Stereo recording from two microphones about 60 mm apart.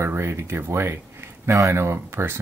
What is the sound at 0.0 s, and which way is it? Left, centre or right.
Speech, right.